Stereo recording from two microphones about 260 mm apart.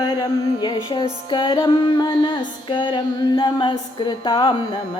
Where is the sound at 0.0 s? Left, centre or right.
Centre.